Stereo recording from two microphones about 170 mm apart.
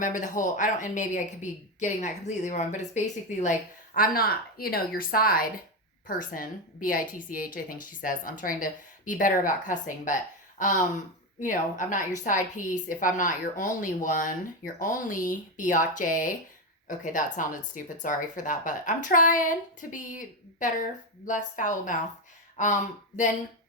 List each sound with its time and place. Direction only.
0.0 s a woman's voice: 50° left (ahead or behind)